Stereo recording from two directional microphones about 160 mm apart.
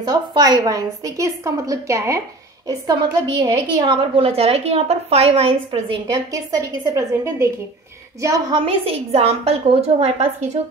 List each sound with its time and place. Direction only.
0.0 s a woman's voice: 25° right (ahead or behind)
6.3 s a woman's voice: 20° right (ahead or behind)
8.6 s a woman's voice: 40° right (ahead or behind)